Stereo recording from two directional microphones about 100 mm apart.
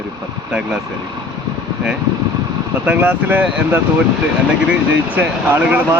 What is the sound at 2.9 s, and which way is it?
Speech, 15° right (ahead or behind).